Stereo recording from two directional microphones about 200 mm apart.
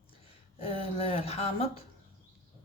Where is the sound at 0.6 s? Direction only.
30° left (ahead or behind).